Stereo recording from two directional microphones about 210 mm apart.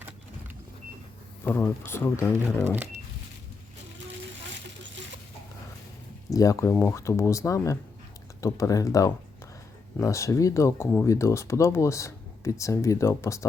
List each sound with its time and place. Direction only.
1.5 s speech: 10° left (ahead or behind)
6.3 s speech: 15° left (ahead or behind)